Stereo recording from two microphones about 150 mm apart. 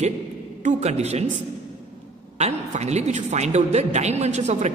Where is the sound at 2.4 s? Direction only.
50° right (ahead or behind).